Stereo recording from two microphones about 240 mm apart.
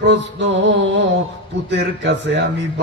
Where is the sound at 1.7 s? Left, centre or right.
Right.